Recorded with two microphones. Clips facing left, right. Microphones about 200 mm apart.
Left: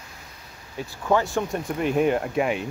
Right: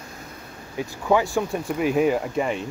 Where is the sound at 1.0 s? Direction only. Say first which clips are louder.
Right 1 dB; 10° right (ahead or behind).